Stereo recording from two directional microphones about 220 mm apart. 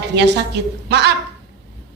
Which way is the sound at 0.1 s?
50° right (ahead or behind).